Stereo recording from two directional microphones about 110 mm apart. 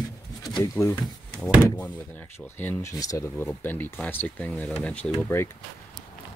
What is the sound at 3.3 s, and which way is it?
Speech, 20° left (ahead or behind).